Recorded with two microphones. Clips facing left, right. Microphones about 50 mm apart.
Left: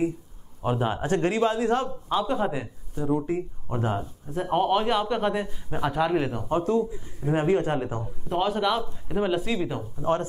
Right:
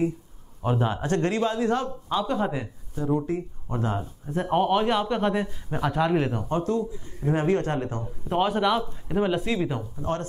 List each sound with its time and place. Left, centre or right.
0.6 s a man's voice: centre; by 2.0 s left
2.0 s a man's voice: centre
4.0 s speech: centre
6.5 s a man's voice: centre
8.3 s speech: centre